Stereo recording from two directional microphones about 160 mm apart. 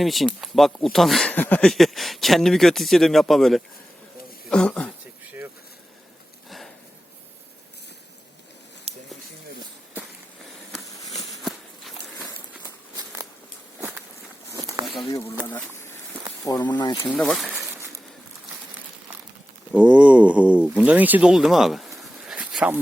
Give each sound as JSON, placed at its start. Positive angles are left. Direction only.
{"t": 0.0, "sound": "speech", "side_deg": 0}
{"t": 11.3, "sound": "walk", "side_deg": 0}
{"t": 14.5, "sound": "a sound", "side_deg": -20}
{"t": 15.4, "sound": "a sound", "side_deg": 10}
{"t": 16.5, "sound": "speech", "side_deg": 25}
{"t": 17.0, "sound": "speech", "side_deg": 5}
{"t": 19.7, "sound": "speech", "side_deg": -10}